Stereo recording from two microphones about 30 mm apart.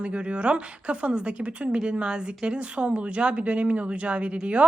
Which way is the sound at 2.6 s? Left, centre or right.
Right.